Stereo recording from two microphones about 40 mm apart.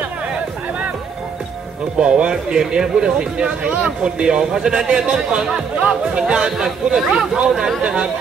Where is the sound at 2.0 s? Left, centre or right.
Right.